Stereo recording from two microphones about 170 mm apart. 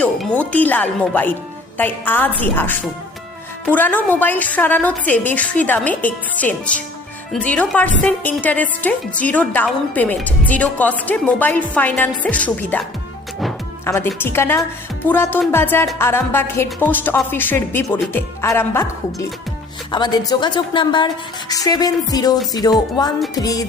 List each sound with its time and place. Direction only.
0.0 s a woman's voice: 10° left (ahead or behind)
13.8 s a woman's voice: 15° left (ahead or behind)
19.9 s a woman's voice: 25° left (ahead or behind)